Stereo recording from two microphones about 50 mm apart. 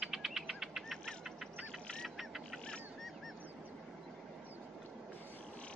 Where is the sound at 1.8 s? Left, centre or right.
Centre.